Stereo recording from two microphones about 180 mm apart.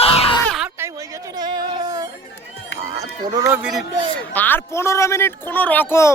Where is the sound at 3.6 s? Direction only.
5° right (ahead or behind).